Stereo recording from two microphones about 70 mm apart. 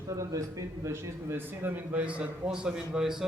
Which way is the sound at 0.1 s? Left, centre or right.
Right.